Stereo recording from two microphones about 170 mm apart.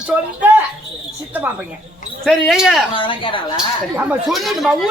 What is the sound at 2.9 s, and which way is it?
Speech, 30° left (ahead or behind).